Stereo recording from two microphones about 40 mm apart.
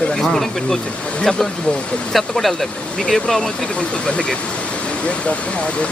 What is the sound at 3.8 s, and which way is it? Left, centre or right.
Speech, left.